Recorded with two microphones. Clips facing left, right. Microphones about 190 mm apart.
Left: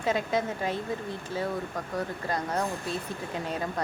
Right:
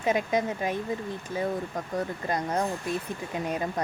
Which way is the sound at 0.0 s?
20° right (ahead or behind).